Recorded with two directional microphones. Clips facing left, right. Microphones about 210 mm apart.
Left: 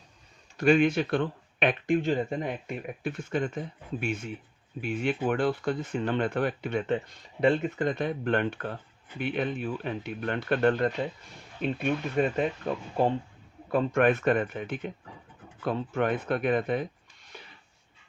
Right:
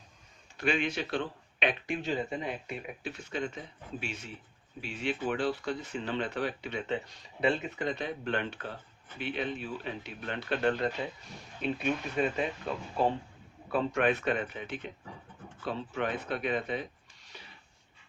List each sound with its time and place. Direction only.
0.5 s speech: 45° left (ahead or behind)
13.7 s speech: 50° left (ahead or behind)
17.3 s a sound: 55° left (ahead or behind)